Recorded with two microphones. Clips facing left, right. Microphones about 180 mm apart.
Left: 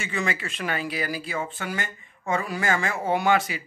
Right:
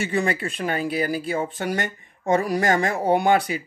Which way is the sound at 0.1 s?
35° right (ahead or behind).